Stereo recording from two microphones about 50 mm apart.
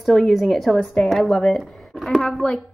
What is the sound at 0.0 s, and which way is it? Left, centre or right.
A woman's voice, centre.